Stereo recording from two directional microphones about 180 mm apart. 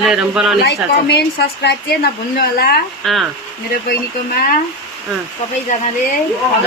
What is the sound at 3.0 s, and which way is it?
Speech, centre (ahead or behind).